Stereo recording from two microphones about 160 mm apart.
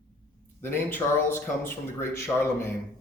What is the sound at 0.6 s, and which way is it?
Speech, 15° left (ahead or behind).